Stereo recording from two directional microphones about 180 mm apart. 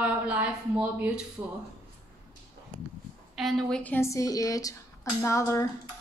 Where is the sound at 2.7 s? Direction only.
Centre (ahead or behind).